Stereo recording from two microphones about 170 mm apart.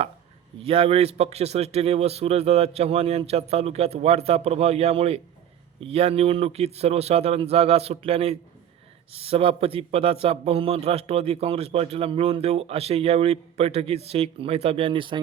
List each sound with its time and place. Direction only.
0.6 s a man's voice: 35° right (ahead or behind)